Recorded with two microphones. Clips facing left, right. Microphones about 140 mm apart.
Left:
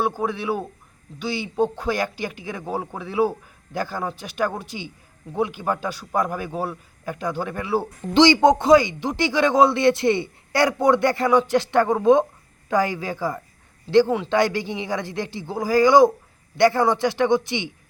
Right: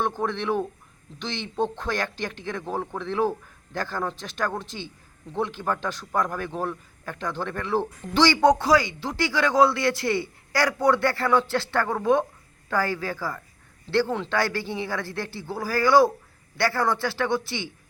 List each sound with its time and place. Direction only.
0.0 s a man's voice: 10° left (ahead or behind)